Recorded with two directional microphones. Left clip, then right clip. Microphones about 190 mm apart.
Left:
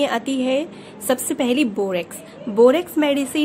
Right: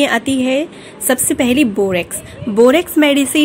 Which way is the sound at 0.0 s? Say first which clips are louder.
Right 6 dB; 35° right (ahead or behind).